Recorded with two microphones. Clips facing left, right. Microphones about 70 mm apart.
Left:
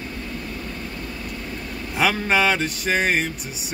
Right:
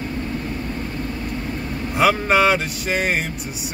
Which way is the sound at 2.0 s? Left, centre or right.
Centre.